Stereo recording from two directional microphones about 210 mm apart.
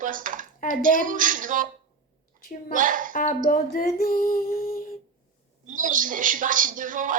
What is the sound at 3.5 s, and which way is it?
Female singing, 45° left (ahead or behind).